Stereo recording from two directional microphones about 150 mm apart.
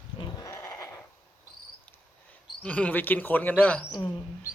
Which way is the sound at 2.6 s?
10° left (ahead or behind).